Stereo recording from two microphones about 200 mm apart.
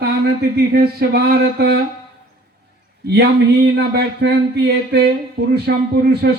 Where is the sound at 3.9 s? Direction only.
55° right (ahead or behind).